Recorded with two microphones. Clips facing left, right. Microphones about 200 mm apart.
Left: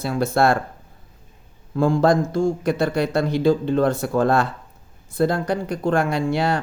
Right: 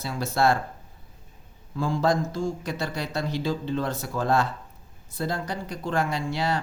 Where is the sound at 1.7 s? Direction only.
55° left (ahead or behind).